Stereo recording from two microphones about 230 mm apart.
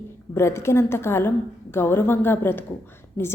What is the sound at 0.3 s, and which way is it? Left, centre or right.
A woman's voice, centre.